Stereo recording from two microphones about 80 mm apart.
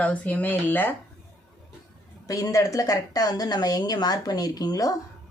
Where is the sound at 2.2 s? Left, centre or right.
Left.